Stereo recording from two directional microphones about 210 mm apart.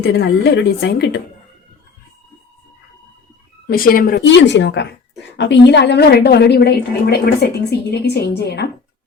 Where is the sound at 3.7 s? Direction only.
45° left (ahead or behind).